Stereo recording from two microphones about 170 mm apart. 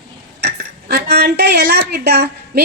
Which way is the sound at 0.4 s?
75° right (ahead or behind).